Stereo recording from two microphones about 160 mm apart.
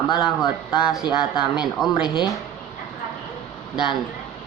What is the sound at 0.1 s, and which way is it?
Speech, 25° left (ahead or behind).